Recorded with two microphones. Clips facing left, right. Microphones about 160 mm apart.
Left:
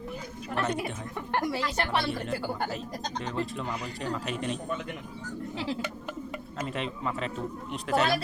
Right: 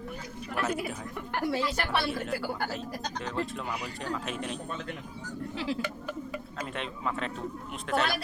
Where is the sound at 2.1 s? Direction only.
Centre (ahead or behind).